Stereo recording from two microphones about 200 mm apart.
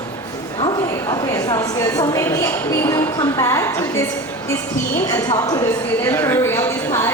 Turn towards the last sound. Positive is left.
turn(degrees=15)  # may be behind; listen again after turning